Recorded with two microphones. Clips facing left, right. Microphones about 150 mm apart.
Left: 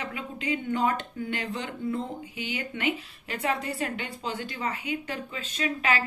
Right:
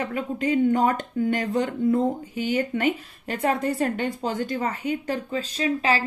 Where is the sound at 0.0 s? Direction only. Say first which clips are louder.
Right 8 dB; 45° right (ahead or behind).